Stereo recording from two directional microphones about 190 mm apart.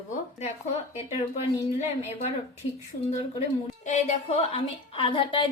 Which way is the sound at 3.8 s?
40° left (ahead or behind).